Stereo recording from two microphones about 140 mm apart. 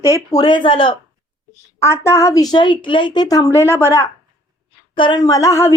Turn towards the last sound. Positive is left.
turn(degrees=20)  # may be behind; listen again after turning